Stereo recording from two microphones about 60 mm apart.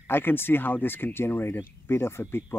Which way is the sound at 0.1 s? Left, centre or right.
Left.